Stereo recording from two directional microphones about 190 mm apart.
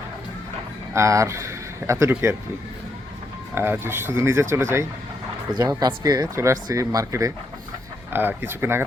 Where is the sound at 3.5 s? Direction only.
10° right (ahead or behind).